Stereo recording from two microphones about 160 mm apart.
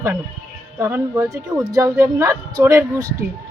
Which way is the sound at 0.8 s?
15° right (ahead or behind).